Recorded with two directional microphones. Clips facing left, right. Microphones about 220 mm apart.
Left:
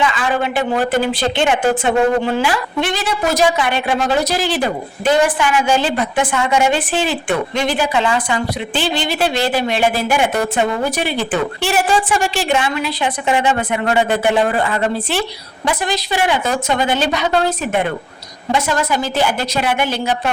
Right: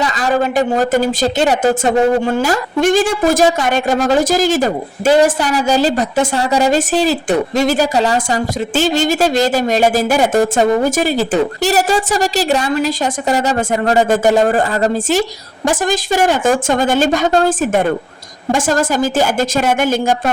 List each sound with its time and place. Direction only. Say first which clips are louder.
0.0 s a woman's voice: right 2 dB; 40° right (ahead or behind)